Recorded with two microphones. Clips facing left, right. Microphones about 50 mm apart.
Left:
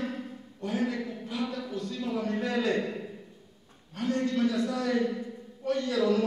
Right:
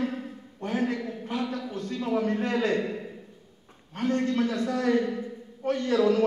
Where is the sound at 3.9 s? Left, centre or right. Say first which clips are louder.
Right 2 dB; right.